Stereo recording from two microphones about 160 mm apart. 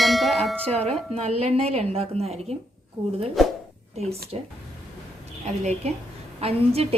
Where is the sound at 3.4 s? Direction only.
Centre (ahead or behind).